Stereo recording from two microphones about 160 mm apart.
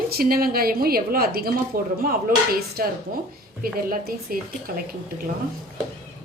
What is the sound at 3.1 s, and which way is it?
Speech, 60° right (ahead or behind).